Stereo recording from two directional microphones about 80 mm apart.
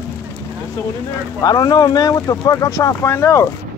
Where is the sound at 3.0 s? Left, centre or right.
Left.